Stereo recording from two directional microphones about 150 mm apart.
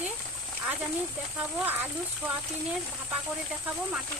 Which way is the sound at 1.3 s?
10° right (ahead or behind).